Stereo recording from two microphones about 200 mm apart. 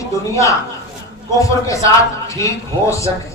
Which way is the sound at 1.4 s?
15° left (ahead or behind).